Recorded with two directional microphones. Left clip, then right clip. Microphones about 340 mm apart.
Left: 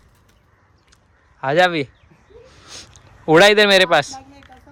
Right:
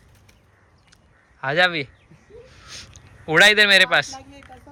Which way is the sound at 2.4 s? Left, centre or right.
Centre.